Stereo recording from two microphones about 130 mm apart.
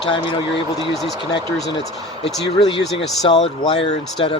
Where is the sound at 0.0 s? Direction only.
40° left (ahead or behind).